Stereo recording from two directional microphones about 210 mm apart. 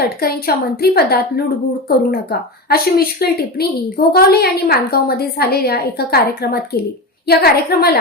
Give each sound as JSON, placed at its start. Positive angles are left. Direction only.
{"t": 0.2, "sound": "a woman's voice", "side_deg": 45}